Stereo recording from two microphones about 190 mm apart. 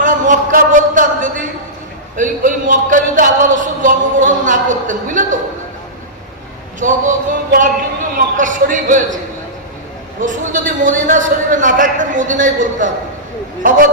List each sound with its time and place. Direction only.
0.0 s a sound: 45° right (ahead or behind)
2.1 s a man's voice: 45° right (ahead or behind)
6.7 s a man's voice: 40° right (ahead or behind)
8.1 s a man's voice: 45° right (ahead or behind)
10.2 s a man's voice: 45° right (ahead or behind)